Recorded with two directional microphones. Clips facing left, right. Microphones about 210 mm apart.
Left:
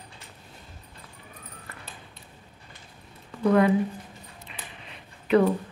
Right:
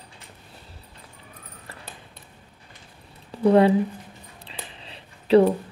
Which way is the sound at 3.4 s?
30° right (ahead or behind).